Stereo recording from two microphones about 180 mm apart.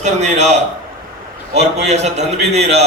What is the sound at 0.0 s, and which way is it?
Speech, 40° right (ahead or behind).